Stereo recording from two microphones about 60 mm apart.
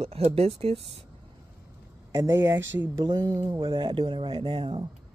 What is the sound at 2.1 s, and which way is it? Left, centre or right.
Speech, right.